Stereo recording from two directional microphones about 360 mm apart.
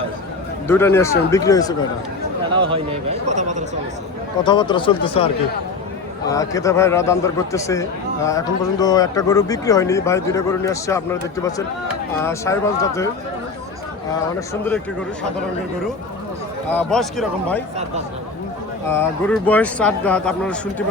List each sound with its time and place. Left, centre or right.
0.7 s a man's voice: centre
2.6 s speech: centre
4.4 s a man's voice: centre
14.3 s a man's voice: centre
16.6 s a man's voice: centre
18.9 s a man's voice: centre